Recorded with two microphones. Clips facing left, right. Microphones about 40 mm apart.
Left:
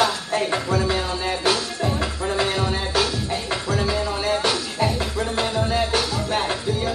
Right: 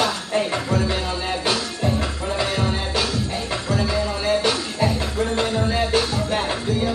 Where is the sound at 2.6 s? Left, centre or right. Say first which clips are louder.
Left 1 dB; right.